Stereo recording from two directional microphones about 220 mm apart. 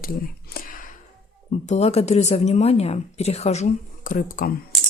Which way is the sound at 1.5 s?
30° left (ahead or behind).